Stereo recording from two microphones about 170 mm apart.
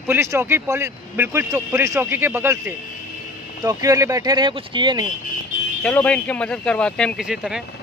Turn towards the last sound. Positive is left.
turn(degrees=-5)  # may be behind; listen again after turning